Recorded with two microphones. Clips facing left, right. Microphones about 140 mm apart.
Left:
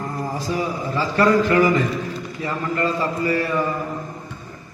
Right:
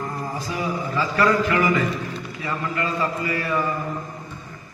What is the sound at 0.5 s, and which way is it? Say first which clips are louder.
A man's voice: left 1 dB; 35° left (ahead or behind).